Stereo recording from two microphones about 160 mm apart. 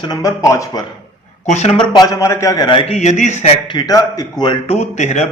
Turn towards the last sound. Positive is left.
turn(degrees=45)  # may be behind; listen again after turning